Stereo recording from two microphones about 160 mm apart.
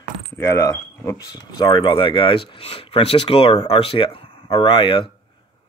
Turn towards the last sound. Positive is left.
turn(degrees=30)  # may be behind; listen again after turning